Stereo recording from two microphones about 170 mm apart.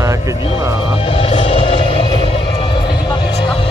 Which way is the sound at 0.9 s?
30° left (ahead or behind).